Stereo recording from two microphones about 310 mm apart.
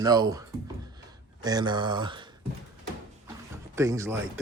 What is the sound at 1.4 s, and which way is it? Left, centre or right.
Speech, centre.